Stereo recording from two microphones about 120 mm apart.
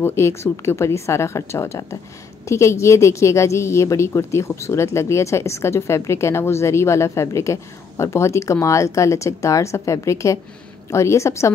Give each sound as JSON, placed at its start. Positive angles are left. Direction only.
{"t": 0.0, "sound": "a woman's voice", "side_deg": 20}